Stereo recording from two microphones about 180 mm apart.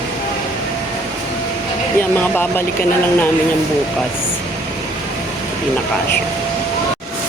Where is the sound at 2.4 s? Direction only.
10° left (ahead or behind).